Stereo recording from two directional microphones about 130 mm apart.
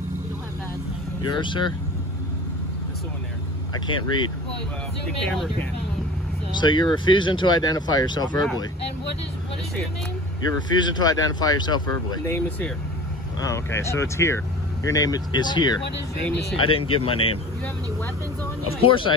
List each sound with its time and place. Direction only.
1.3 s speech: 35° left (ahead or behind)
3.7 s speech: 35° left (ahead or behind)
5.0 s speech: 5° left (ahead or behind)
6.5 s speech: 35° left (ahead or behind)
10.7 s speech: 35° left (ahead or behind)
12.3 s speech: 15° left (ahead or behind); by 15.8 s 35° left (ahead or behind)
16.5 s speech: 45° left (ahead or behind)
18.7 s speech: 45° left (ahead or behind)